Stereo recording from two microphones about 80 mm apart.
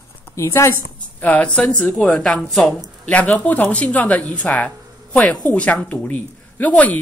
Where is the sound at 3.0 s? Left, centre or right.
Centre.